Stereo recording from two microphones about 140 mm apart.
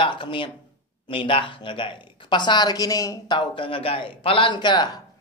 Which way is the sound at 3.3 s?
40° left (ahead or behind).